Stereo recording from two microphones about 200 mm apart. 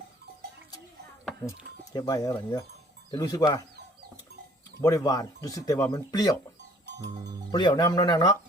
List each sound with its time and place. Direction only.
1.5 s speech: 20° left (ahead or behind)
4.8 s speech: 15° left (ahead or behind)
7.0 s speech: 20° right (ahead or behind)
7.5 s speech: 20° left (ahead or behind)